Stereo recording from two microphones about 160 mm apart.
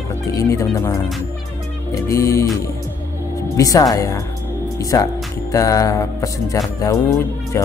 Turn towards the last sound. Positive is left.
turn(degrees=20)  # may be behind; listen again after turning